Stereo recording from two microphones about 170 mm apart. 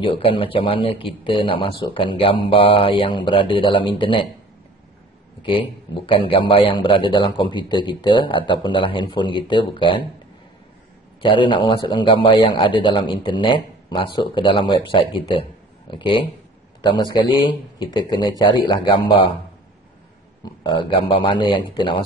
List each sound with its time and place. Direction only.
0.0 s speech: 30° left (ahead or behind)
5.4 s a man's voice: 30° left (ahead or behind)
11.2 s a man's voice: 30° left (ahead or behind)
20.6 s a man's voice: 30° left (ahead or behind)